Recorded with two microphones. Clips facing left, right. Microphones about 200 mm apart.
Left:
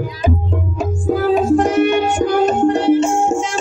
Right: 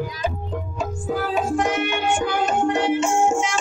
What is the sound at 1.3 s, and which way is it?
Music, 35° left (ahead or behind).